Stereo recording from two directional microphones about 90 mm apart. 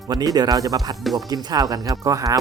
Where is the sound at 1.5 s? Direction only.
45° right (ahead or behind).